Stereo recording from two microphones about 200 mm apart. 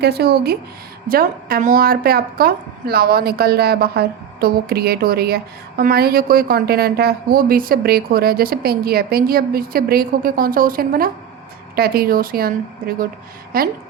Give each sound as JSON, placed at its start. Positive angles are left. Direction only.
{"t": 0.0, "sound": "a woman's voice", "side_deg": -55}